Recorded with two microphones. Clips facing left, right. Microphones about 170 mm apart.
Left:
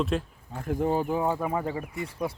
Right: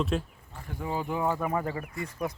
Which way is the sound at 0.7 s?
50° left (ahead or behind).